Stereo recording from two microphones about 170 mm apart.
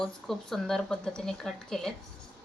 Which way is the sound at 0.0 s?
Centre (ahead or behind).